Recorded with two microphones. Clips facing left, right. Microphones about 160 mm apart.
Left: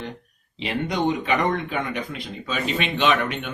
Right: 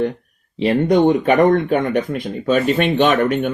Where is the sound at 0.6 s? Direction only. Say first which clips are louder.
Right 10 dB; 50° right (ahead or behind).